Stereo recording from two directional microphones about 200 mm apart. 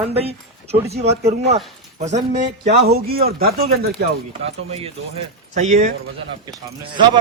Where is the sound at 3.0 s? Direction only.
50° right (ahead or behind).